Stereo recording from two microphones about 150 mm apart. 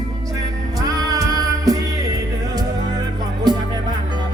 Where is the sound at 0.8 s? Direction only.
25° right (ahead or behind).